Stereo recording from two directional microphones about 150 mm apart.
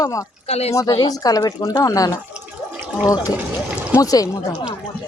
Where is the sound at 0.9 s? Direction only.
25° left (ahead or behind).